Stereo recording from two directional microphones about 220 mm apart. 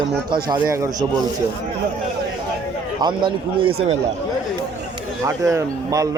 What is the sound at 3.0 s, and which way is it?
Speech, 20° right (ahead or behind).